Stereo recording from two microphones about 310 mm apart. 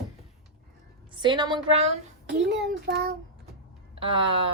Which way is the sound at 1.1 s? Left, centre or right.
Centre.